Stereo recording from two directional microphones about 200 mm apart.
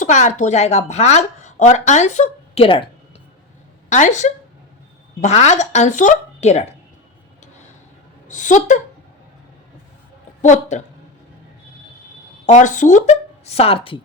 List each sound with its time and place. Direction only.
0.0 s a woman's voice: 35° left (ahead or behind)
3.8 s a woman's voice: 35° left (ahead or behind)
8.3 s a woman's voice: 40° left (ahead or behind)
10.4 s a woman's voice: 35° left (ahead or behind)
12.5 s speech: 35° left (ahead or behind)